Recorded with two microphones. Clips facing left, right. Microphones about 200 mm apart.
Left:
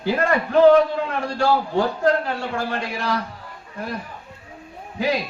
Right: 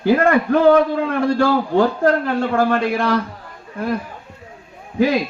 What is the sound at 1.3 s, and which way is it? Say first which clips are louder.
A man's voice: right 2 dB; 55° right (ahead or behind).